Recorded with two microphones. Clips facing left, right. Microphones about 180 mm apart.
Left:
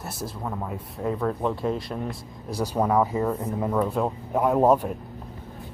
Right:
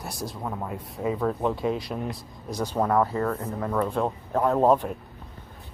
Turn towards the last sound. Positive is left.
turn(degrees=10)  # may be behind; listen again after turning